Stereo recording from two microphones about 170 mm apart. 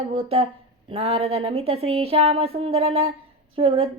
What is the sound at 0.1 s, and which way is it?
Speech, 35° right (ahead or behind).